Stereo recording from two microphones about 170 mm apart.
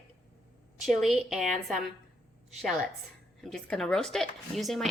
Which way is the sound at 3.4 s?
5° left (ahead or behind).